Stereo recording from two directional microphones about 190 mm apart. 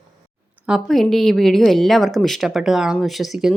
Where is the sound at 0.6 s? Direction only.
Centre (ahead or behind).